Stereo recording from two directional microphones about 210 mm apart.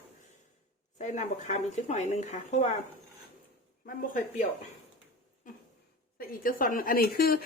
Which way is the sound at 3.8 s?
40° left (ahead or behind).